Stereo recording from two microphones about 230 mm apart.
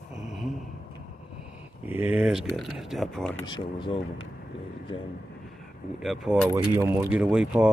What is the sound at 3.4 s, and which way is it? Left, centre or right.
Speech, left.